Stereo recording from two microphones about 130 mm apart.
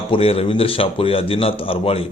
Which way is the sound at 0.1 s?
50° left (ahead or behind).